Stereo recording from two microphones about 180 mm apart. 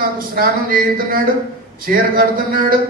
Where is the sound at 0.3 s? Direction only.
55° right (ahead or behind).